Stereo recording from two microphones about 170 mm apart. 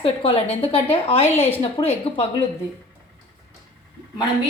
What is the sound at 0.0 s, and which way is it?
Speech, 35° left (ahead or behind).